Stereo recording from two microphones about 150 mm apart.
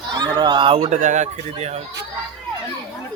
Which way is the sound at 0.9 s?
55° right (ahead or behind).